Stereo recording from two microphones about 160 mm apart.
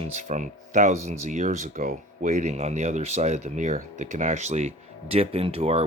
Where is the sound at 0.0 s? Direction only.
45° right (ahead or behind).